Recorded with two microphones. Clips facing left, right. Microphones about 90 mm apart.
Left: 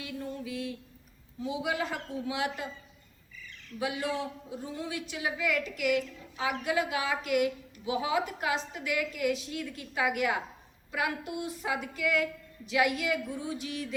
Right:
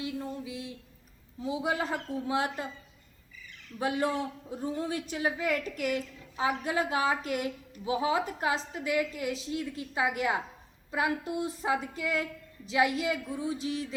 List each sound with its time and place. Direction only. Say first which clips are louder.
0.0 s a sound: right 2 dB; 25° right (ahead or behind)
1.4 s a woman's voice: right 1 dB; 35° right (ahead or behind)
3.8 s a woman's voice: right 3 dB; 40° right (ahead or behind)